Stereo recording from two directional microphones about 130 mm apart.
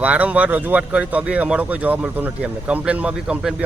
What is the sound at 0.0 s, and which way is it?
Speech, 10° right (ahead or behind).